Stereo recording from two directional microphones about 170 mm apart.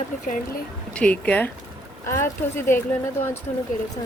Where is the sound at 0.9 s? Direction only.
5° left (ahead or behind).